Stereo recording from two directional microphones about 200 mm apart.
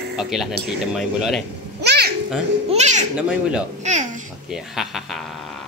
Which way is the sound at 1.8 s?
55° right (ahead or behind).